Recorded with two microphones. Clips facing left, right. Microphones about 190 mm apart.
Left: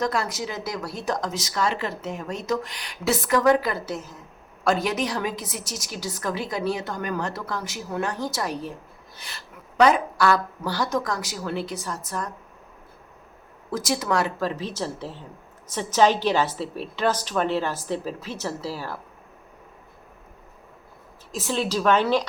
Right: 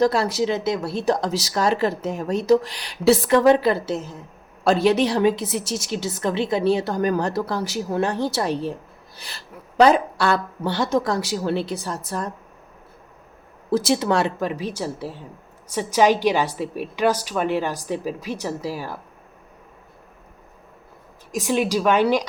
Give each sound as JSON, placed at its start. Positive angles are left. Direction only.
{"t": 0.0, "sound": "a woman's voice", "side_deg": -30}
{"t": 13.7, "sound": "a woman's voice", "side_deg": -30}
{"t": 14.4, "sound": "a woman's voice", "side_deg": -10}
{"t": 21.3, "sound": "a woman's voice", "side_deg": -15}